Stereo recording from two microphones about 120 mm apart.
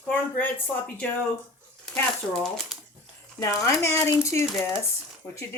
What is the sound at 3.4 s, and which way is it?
Speech, 25° left (ahead or behind).